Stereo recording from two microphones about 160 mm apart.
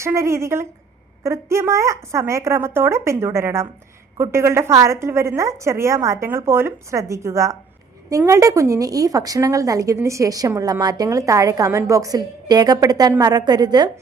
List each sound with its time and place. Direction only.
0.0 s a woman's voice: 20° right (ahead or behind)